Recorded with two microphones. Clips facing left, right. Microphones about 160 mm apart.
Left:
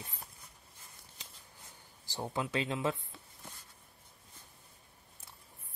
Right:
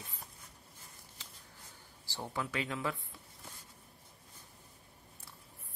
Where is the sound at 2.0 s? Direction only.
15° left (ahead or behind).